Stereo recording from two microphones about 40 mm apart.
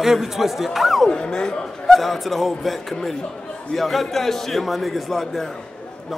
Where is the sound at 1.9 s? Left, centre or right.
Centre.